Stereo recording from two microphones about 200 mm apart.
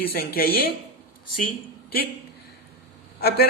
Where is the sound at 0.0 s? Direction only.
50° left (ahead or behind).